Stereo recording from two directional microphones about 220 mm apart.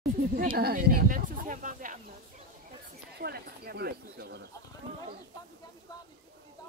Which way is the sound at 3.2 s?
45° right (ahead or behind).